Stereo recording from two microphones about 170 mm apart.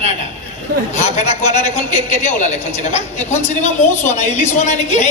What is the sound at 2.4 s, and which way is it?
A woman's voice, 45° left (ahead or behind).